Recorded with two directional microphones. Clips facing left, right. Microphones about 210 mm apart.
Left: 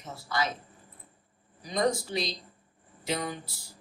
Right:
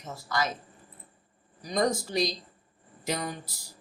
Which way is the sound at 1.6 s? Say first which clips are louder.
Right 1 dB; 45° right (ahead or behind).